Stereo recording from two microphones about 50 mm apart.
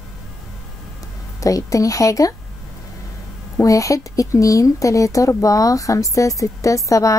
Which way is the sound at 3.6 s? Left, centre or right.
Left.